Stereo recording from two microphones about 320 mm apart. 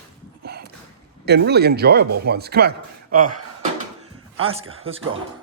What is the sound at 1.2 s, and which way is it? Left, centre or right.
Speech, right.